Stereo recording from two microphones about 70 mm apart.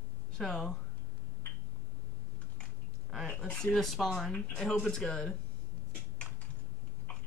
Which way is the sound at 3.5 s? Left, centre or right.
Centre.